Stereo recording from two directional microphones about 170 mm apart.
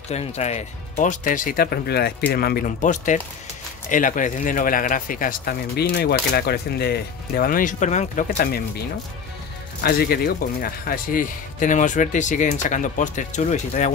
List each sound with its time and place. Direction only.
0.1 s speech: 40° left (ahead or behind); by 8.6 s 60° left (ahead or behind)
9.8 s speech: 65° left (ahead or behind); by 13.9 s 45° left (ahead or behind)